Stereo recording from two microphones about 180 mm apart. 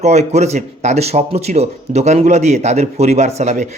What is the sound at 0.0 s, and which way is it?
Speech, 40° right (ahead or behind).